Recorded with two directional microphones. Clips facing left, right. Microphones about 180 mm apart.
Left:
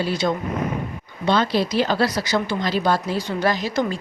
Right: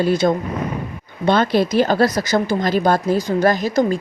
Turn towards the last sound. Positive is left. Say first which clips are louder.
# right 5 dB
turn(degrees=-45)  # may be behind; listen again after turning